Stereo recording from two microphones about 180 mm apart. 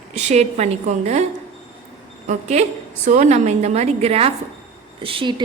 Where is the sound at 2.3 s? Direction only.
35° right (ahead or behind).